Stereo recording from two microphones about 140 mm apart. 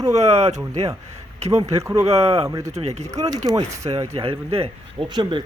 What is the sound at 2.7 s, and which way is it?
Speech, 50° right (ahead or behind).